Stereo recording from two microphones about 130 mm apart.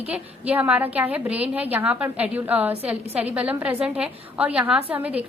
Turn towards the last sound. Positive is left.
turn(degrees=-10)  # may be behind; listen again after turning